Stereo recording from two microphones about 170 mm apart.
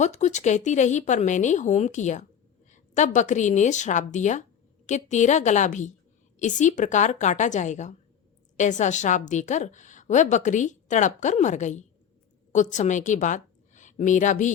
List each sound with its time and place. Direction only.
0.0 s a woman's voice: 45° left (ahead or behind)